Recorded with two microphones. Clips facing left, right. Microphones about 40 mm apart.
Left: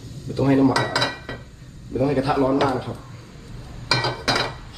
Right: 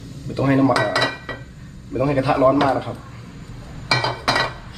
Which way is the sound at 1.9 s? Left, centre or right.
Right.